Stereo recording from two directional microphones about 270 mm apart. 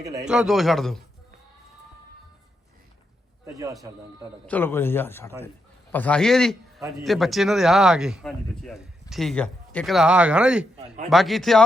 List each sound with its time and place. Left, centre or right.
0.0 s a man's voice: centre
0.3 s a man's voice: centre
4.4 s a man's voice: centre
10.8 s a man's voice: right
11.1 s a man's voice: centre